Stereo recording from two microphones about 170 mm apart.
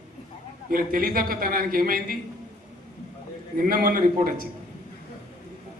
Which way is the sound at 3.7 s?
55° right (ahead or behind).